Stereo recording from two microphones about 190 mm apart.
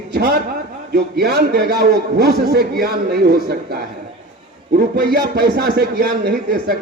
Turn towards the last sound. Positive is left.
turn(degrees=-60)  # may be behind; listen again after turning